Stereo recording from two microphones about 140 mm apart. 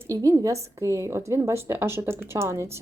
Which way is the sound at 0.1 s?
25° right (ahead or behind).